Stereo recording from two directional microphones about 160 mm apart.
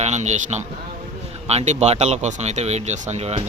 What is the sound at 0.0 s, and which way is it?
Speech, 45° right (ahead or behind).